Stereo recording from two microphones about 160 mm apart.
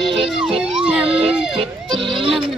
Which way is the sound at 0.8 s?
5° right (ahead or behind).